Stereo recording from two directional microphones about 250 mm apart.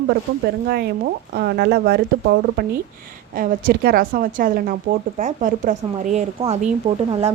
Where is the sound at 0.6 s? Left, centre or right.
Right.